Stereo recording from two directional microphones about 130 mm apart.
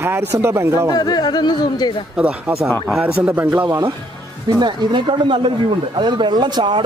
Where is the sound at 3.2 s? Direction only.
15° right (ahead or behind).